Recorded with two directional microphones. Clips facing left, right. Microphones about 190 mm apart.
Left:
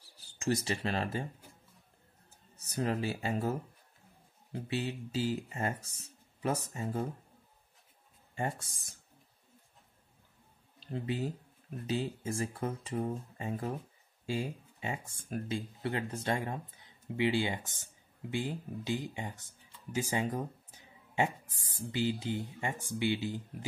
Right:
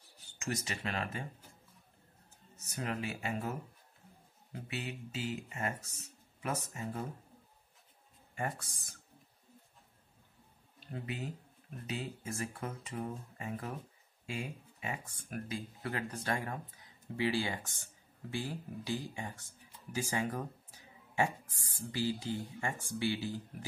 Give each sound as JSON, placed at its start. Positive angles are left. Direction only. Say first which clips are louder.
{"t": 0.2, "sound": "speech", "louder": "left 7 dB", "side_deg": 35}
{"t": 2.6, "sound": "speech", "louder": "left 5 dB", "side_deg": 30}
{"t": 8.4, "sound": "speech", "louder": "left 3 dB", "side_deg": 25}
{"t": 10.9, "sound": "speech", "louder": "left 6 dB", "side_deg": 30}
{"t": 19.9, "sound": "a sound", "louder": "left 3 dB", "side_deg": 20}
{"t": 21.9, "sound": "speech", "louder": "left 2 dB", "side_deg": 20}